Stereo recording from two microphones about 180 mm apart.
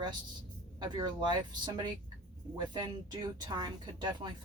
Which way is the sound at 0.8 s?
25° right (ahead or behind).